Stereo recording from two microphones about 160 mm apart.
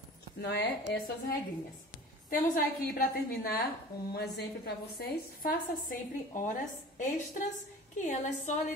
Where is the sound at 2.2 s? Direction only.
60° left (ahead or behind).